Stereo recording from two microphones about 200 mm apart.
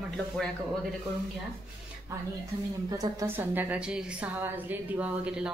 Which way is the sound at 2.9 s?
15° right (ahead or behind).